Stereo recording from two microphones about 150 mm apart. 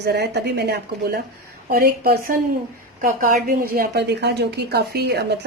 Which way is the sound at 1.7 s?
75° right (ahead or behind).